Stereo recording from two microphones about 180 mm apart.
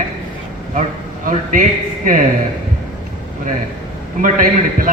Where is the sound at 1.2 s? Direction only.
45° right (ahead or behind).